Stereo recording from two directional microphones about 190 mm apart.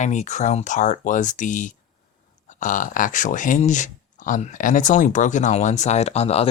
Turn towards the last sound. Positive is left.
turn(degrees=35)  # may be behind; listen again after turning